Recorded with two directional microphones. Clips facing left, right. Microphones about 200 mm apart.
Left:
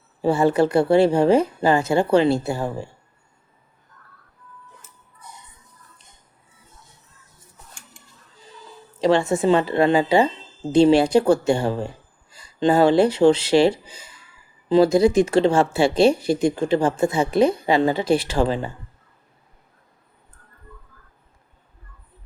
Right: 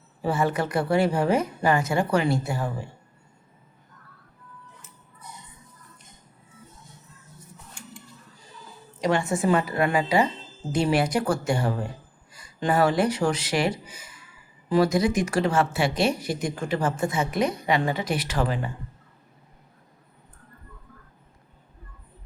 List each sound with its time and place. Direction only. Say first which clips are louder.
0.2 s speech: left 7 dB; 30° left (ahead or behind)
9.0 s speech: left 6 dB; 25° left (ahead or behind)